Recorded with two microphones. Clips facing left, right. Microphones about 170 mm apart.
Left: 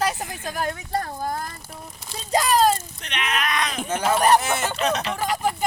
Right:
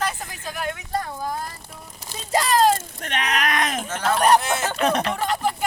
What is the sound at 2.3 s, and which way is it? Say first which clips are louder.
Speech: left 1 dB; 15° left (ahead or behind).